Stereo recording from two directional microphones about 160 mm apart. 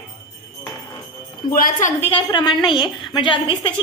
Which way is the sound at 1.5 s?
60° left (ahead or behind).